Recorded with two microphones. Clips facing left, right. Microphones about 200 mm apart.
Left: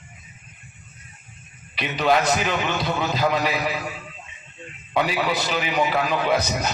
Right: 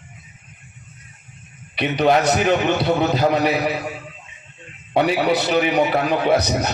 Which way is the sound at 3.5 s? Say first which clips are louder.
Right 5 dB; 40° right (ahead or behind).